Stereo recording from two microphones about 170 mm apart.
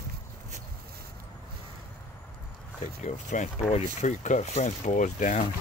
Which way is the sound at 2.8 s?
45° left (ahead or behind).